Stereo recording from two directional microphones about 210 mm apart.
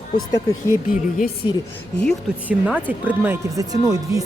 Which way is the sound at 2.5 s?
5° right (ahead or behind).